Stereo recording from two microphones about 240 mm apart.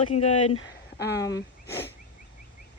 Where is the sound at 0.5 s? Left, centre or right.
Left.